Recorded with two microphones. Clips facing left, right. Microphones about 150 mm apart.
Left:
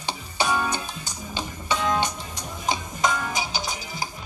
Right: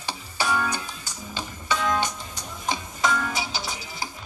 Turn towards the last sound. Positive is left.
turn(degrees=20)  # may be behind; listen again after turning